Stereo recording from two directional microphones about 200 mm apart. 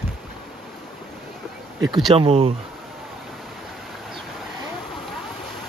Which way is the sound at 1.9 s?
Centre (ahead or behind).